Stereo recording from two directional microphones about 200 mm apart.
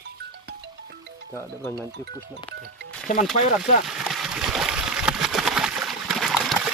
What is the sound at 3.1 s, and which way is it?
Speech, 35° left (ahead or behind).